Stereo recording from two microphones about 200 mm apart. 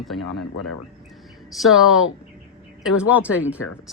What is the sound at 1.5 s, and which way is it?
Speech, centre (ahead or behind).